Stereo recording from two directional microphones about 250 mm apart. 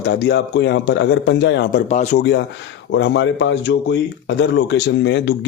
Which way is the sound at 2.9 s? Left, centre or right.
Left.